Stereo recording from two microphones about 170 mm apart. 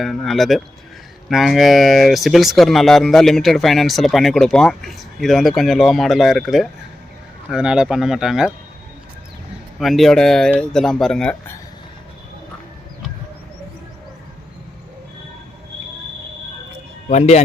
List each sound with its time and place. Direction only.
0.0 s speech: centre (ahead or behind)
9.7 s speech: centre (ahead or behind)
17.1 s speech: 40° left (ahead or behind)